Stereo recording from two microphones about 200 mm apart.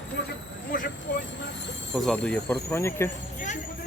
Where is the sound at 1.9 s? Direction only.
Centre (ahead or behind).